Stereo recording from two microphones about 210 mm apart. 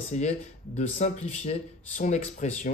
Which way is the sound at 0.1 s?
35° left (ahead or behind).